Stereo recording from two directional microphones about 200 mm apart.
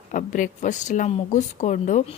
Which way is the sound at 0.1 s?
40° left (ahead or behind).